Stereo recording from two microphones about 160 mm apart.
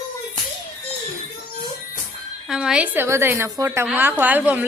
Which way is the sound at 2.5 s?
5° right (ahead or behind).